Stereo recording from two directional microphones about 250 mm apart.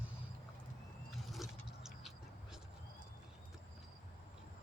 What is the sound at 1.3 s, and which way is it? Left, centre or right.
Vehicle, centre.